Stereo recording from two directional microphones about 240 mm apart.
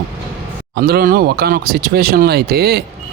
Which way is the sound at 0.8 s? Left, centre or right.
Right.